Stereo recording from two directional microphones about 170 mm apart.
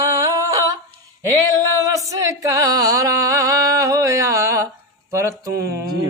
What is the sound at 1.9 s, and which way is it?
Music, 20° right (ahead or behind).